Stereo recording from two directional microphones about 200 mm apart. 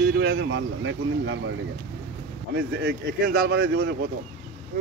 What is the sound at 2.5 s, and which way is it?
Speech, 55° right (ahead or behind).